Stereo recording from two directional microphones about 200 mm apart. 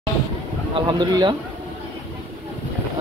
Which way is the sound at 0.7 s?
20° right (ahead or behind).